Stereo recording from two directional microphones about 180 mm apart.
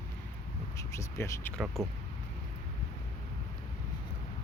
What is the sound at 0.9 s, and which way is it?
Speech, 15° left (ahead or behind).